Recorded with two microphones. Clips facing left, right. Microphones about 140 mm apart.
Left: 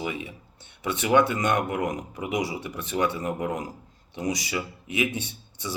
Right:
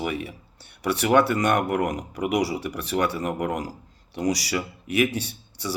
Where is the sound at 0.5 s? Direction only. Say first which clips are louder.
Right 4 dB; 20° left (ahead or behind).